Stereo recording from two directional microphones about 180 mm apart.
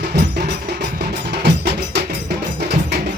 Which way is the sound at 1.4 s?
70° right (ahead or behind).